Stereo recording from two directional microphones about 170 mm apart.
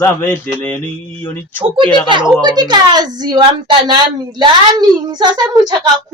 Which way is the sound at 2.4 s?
25° right (ahead or behind).